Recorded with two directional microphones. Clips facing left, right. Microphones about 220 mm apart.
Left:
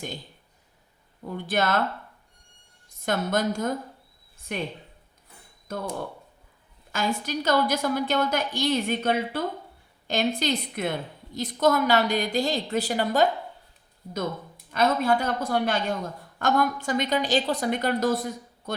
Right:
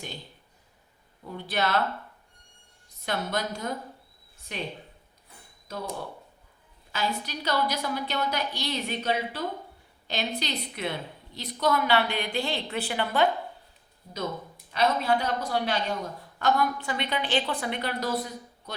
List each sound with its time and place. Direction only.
1.5 s a woman's voice: 45° left (ahead or behind)
3.0 s a woman's voice: 50° left (ahead or behind)
5.7 s a woman's voice: 50° left (ahead or behind)
6.9 s a woman's voice: 45° left (ahead or behind)
14.7 s a woman's voice: 50° left (ahead or behind)